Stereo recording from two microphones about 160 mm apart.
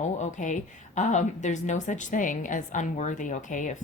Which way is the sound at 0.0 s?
50° left (ahead or behind).